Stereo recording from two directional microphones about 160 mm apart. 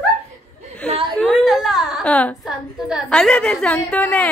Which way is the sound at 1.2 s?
Centre (ahead or behind).